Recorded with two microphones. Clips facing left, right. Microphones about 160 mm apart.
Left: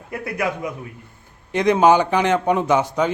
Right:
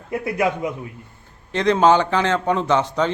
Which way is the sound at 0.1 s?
25° right (ahead or behind).